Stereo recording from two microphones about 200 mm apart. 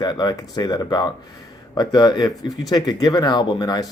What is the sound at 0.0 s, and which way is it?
Speech, 20° left (ahead or behind).